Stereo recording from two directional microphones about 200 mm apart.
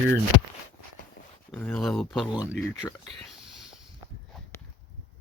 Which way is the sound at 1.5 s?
10° left (ahead or behind).